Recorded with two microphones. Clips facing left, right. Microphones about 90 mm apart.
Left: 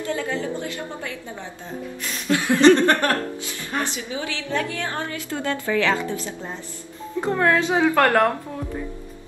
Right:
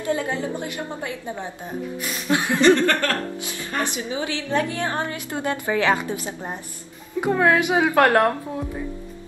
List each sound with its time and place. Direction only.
0.0 s a woman's voice: 20° right (ahead or behind)
2.6 s chuckle: 20° left (ahead or behind)
3.8 s a woman's voice: 20° right (ahead or behind)